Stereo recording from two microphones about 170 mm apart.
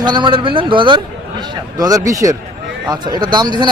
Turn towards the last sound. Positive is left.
turn(degrees=-25)  # may be behind; listen again after turning